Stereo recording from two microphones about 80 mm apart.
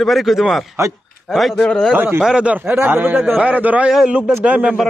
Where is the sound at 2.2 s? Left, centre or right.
Centre.